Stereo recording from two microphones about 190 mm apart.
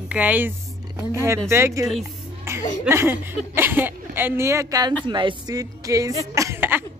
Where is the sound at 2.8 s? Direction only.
10° right (ahead or behind).